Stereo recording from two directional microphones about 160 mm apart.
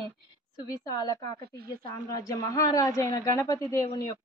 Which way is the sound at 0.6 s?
25° left (ahead or behind).